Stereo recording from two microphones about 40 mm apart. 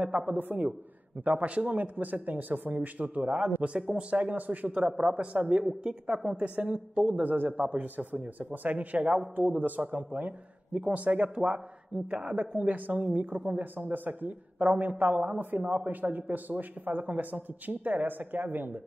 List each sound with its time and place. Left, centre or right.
0.4 s a woman's voice: right
1.2 s a woman's voice: right
1.7 s a woman's voice: right
10.7 s a woman's voice: right
12.3 s a woman's voice: right